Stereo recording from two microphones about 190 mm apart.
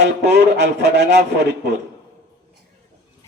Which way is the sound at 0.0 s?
65° right (ahead or behind).